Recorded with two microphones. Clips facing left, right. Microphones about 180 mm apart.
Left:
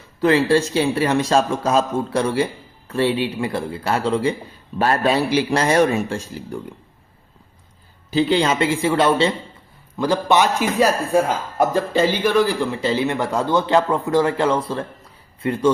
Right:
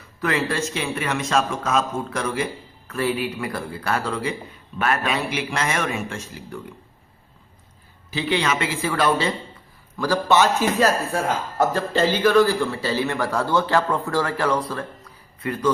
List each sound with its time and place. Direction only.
0.2 s speech: 30° left (ahead or behind)
8.1 s a man's voice: 30° left (ahead or behind)